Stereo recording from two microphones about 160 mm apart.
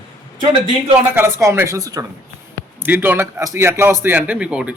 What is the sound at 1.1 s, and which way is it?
A man's voice, 15° right (ahead or behind).